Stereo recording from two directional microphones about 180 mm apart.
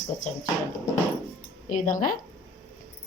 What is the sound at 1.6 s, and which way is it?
Speech, 45° left (ahead or behind).